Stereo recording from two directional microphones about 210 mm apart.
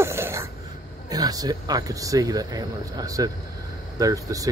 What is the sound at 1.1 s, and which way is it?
Speech, 15° right (ahead or behind).